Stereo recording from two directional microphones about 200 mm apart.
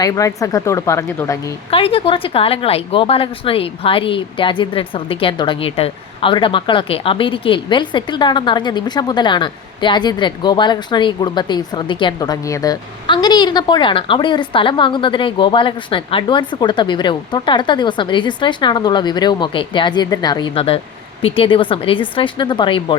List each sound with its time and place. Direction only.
0.0 s speech: 15° left (ahead or behind)
1.7 s a woman's voice: 30° left (ahead or behind)